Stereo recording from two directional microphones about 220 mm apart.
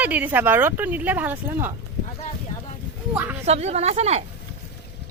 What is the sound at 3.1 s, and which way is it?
Speech, 10° right (ahead or behind).